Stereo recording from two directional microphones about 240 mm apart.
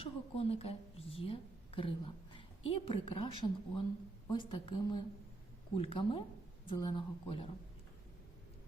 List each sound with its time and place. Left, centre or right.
0.0 s a woman's voice: left